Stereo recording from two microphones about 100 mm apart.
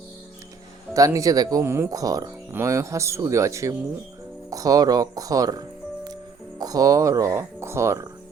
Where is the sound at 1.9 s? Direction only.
35° right (ahead or behind).